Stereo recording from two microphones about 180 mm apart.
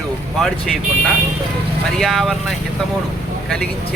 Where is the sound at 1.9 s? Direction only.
Centre (ahead or behind).